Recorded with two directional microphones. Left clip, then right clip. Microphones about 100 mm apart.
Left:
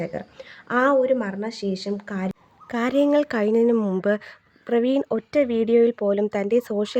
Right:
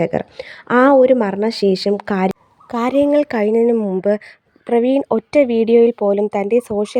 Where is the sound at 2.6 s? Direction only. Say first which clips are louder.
Right 5 dB; 35° right (ahead or behind).